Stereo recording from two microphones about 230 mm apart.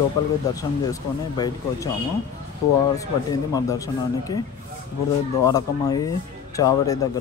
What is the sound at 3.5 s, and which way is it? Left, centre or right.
Speech, centre.